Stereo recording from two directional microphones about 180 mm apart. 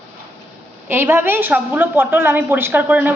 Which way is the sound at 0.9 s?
10° right (ahead or behind).